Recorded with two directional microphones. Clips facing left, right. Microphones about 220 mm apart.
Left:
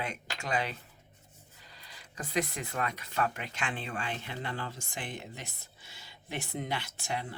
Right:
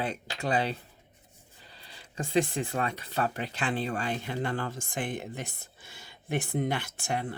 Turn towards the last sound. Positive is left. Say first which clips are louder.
# right 4 dB
turn(degrees=-50)  # may be behind; listen again after turning